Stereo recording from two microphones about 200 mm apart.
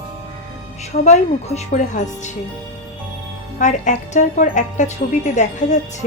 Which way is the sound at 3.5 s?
35° left (ahead or behind).